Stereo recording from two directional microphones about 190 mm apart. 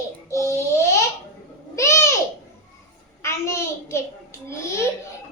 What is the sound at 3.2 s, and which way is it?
Child singing, 15° left (ahead or behind).